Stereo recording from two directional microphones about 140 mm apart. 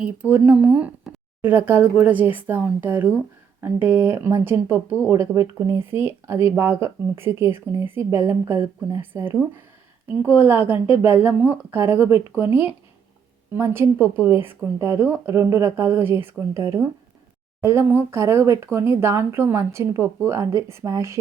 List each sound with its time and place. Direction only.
0.0 s speech: 10° right (ahead or behind)